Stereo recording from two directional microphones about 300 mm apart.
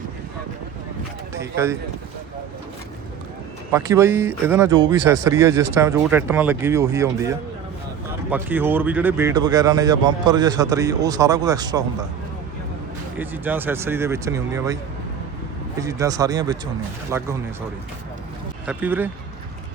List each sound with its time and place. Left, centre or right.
1.3 s speech: centre
3.7 s speech: centre
13.1 s speech: centre
15.8 s speech: centre
18.6 s speech: centre